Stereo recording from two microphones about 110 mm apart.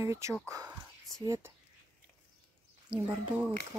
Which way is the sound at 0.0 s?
25° right (ahead or behind).